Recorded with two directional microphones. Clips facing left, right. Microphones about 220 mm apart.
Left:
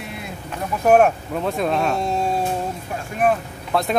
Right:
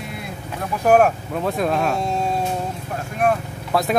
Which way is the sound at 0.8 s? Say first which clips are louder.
Left 1 dB; centre (ahead or behind).